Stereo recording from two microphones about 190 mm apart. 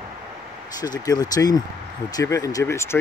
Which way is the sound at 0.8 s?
20° left (ahead or behind).